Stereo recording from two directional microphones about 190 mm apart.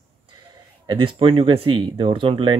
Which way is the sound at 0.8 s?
25° right (ahead or behind).